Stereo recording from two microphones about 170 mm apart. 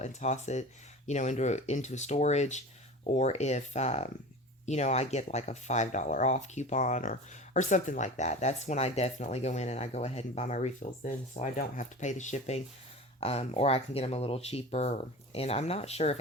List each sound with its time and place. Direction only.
0.0 s speech: 45° left (ahead or behind)